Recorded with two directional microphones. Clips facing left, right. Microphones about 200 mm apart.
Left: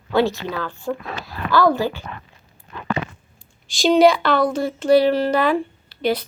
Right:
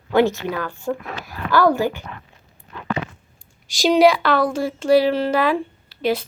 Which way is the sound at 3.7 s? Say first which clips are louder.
Even; 5° right (ahead or behind).